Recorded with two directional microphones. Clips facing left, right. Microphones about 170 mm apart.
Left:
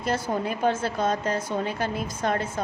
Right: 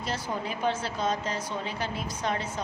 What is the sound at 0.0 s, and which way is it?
A woman's voice, 50° left (ahead or behind).